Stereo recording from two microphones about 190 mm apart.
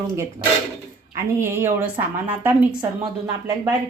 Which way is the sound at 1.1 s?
15° right (ahead or behind).